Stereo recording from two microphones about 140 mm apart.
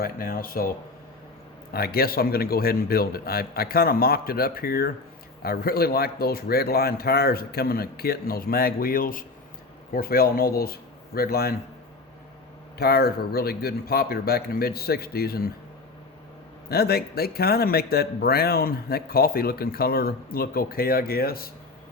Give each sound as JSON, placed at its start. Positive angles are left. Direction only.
{"t": 0.0, "sound": "a man's voice", "side_deg": 90}
{"t": 1.7, "sound": "a man's voice", "side_deg": 90}
{"t": 12.8, "sound": "a man's voice", "side_deg": 90}
{"t": 16.6, "sound": "a man's voice", "side_deg": 90}